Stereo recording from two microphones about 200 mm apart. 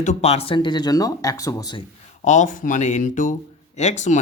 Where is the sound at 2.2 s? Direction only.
35° left (ahead or behind).